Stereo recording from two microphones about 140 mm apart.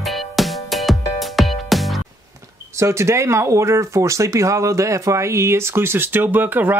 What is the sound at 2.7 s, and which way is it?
Speech, 20° right (ahead or behind).